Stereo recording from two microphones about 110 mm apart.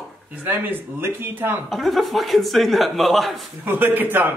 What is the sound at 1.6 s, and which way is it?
A man's voice, centre (ahead or behind).